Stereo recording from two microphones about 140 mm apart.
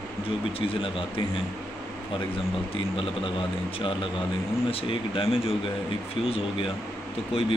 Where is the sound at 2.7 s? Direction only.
40° left (ahead or behind).